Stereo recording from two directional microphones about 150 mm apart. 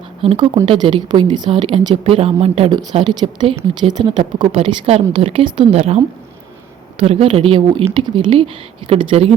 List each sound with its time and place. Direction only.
0.2 s a woman's voice: 40° right (ahead or behind)
2.9 s a woman's voice: 30° right (ahead or behind)
7.0 s a woman's voice: 40° right (ahead or behind)